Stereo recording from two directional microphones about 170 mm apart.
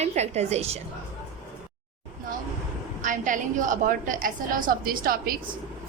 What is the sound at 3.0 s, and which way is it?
A woman's voice, 50° right (ahead or behind).